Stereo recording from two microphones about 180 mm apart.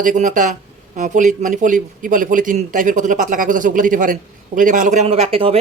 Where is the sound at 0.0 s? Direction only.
45° right (ahead or behind).